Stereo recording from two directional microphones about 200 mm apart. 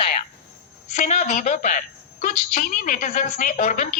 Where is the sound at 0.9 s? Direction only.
35° left (ahead or behind).